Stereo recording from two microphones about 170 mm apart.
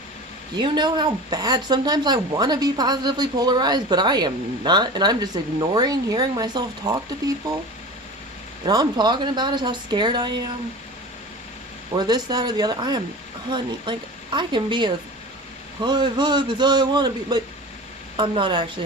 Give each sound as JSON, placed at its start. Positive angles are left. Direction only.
{"t": 0.5, "sound": "speech", "side_deg": -25}
{"t": 8.6, "sound": "speech", "side_deg": -25}
{"t": 11.9, "sound": "speech", "side_deg": -25}